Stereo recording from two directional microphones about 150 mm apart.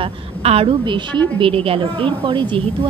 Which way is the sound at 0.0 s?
40° right (ahead or behind).